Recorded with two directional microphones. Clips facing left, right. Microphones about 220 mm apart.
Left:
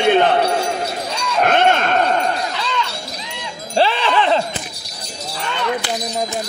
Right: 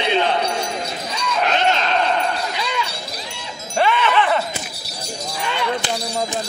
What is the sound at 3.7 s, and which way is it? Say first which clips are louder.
Wind chime: left 1 dB; 30° left (ahead or behind).